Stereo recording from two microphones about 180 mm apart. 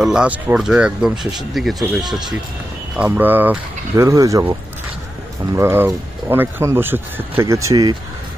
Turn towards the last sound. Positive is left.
turn(degrees=-20)  # may be behind; listen again after turning